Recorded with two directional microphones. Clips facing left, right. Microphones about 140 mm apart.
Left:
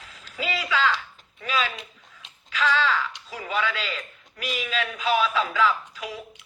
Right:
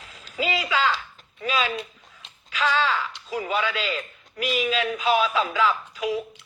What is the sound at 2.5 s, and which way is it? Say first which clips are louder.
A man's voice: even; 20° right (ahead or behind).